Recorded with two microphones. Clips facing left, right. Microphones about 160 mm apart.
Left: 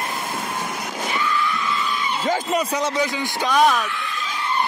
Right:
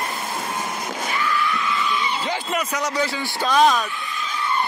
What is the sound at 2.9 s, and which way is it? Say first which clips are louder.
Speech: left 1 dB; 15° left (ahead or behind).